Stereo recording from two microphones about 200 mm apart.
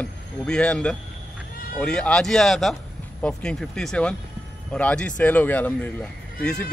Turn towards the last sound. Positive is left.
turn(degrees=5)  # may be behind; listen again after turning